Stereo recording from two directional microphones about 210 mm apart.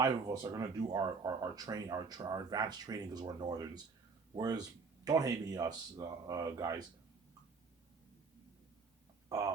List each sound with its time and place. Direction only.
0.0 s speech: 15° right (ahead or behind)